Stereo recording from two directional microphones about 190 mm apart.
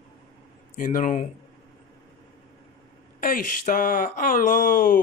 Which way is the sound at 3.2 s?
45° left (ahead or behind).